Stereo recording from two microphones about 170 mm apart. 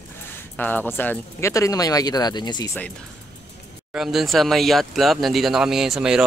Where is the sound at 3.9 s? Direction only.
Centre (ahead or behind).